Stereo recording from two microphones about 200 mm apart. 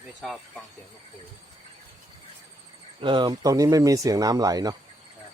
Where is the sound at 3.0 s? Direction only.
25° right (ahead or behind).